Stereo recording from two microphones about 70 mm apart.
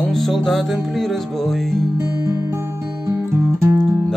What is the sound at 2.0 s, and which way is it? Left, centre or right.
Music, right.